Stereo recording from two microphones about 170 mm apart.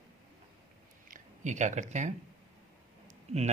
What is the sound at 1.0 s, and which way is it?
Speech, 50° right (ahead or behind).